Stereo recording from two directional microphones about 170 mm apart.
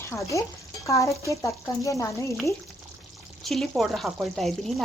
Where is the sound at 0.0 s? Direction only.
15° left (ahead or behind).